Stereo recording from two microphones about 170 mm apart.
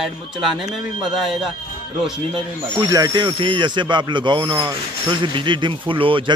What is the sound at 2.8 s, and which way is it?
Speech, 20° right (ahead or behind).